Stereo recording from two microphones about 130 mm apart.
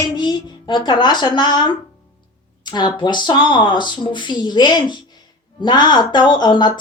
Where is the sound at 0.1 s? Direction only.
35° left (ahead or behind).